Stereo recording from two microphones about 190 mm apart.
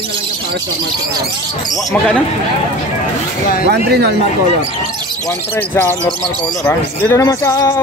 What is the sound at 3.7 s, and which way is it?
Speech, 60° right (ahead or behind).